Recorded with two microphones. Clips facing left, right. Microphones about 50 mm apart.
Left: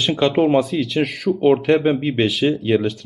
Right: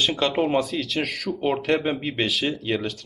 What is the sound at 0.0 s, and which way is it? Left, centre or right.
A man's voice, centre.